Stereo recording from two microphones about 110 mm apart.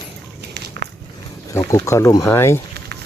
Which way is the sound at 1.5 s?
25° left (ahead or behind).